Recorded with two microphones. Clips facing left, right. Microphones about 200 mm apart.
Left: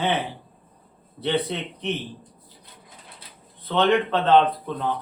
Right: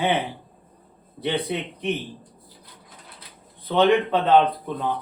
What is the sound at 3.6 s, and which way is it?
Speech, 15° right (ahead or behind).